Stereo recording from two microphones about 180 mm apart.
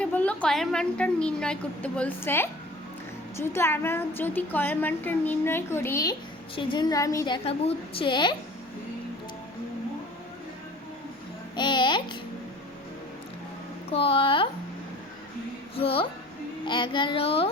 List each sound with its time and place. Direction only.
0.0 s a woman's voice: 10° left (ahead or behind); by 8.4 s 25° left (ahead or behind)
11.5 s babbling: 25° left (ahead or behind)
13.9 s speech: 30° left (ahead or behind)
15.7 s a woman's voice: 30° left (ahead or behind)